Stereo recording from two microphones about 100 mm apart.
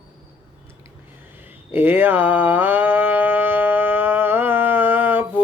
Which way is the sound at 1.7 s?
20° right (ahead or behind).